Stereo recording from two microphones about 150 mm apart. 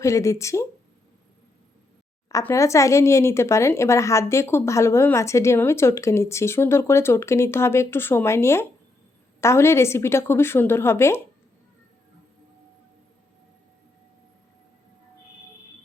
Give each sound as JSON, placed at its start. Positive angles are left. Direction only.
{"t": 0.0, "sound": "speech", "side_deg": 20}
{"t": 2.3, "sound": "speech", "side_deg": 20}